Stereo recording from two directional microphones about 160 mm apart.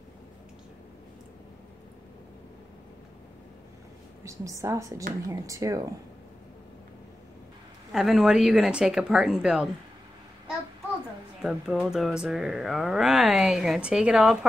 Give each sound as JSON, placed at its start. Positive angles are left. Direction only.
{"t": 4.2, "sound": "a woman's voice", "side_deg": -20}
{"t": 7.9, "sound": "speech", "side_deg": -5}
{"t": 11.4, "sound": "speech", "side_deg": -5}